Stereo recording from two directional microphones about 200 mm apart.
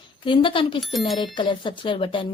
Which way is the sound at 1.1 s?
25° left (ahead or behind).